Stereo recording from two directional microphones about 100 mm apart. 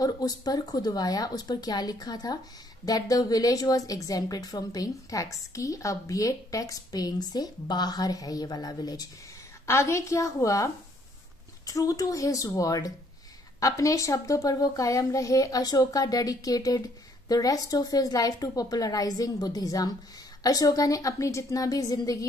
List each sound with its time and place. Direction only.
0.0 s a woman's voice: 40° left (ahead or behind)
9.7 s a woman's voice: 30° left (ahead or behind)